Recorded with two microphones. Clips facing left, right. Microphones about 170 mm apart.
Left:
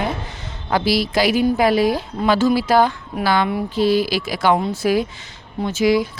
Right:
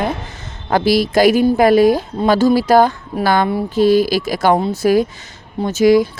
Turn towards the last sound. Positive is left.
turn(degrees=-45)  # may be behind; listen again after turning